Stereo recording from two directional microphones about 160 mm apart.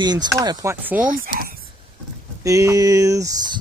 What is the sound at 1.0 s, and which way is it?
Speech, 60° right (ahead or behind).